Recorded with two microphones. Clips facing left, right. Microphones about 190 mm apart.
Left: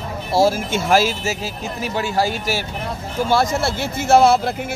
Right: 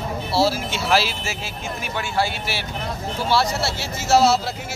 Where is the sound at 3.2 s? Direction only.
50° left (ahead or behind).